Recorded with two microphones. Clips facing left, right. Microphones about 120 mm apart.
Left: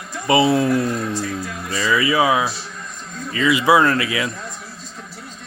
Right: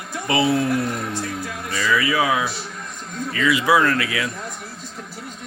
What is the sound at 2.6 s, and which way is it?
Speech, centre (ahead or behind).